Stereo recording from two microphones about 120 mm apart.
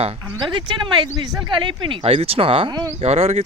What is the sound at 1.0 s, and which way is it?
Speech, 35° right (ahead or behind).